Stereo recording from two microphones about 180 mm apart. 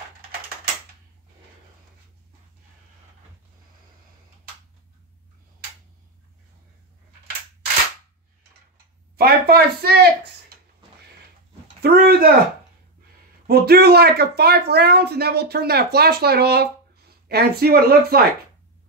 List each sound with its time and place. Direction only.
9.1 s a woman's voice: 60° right (ahead or behind)
11.8 s a sound: 60° right (ahead or behind)
13.5 s speech: 60° right (ahead or behind)